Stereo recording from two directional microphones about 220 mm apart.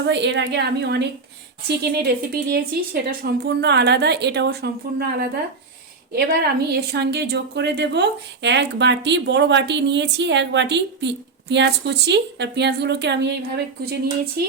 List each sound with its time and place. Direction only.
0.0 s a woman's voice: 50° right (ahead or behind)
14.4 s a woman's voice: 45° right (ahead or behind)